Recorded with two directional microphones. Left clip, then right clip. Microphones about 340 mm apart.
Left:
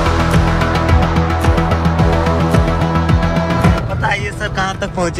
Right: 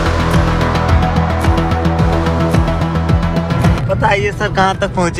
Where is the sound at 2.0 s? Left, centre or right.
Centre.